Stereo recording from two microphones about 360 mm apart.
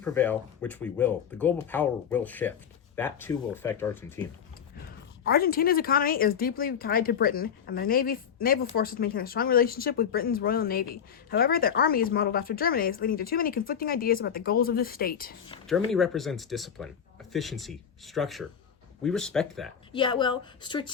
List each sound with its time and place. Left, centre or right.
0.0 s speech: centre
5.2 s speech: left
15.6 s speech: centre
19.9 s a woman's voice: centre